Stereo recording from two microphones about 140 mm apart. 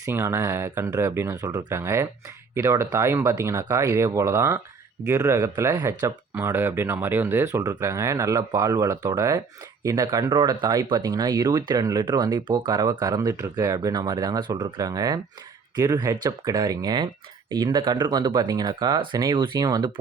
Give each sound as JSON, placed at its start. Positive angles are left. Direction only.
{"t": 0.0, "sound": "speech", "side_deg": -20}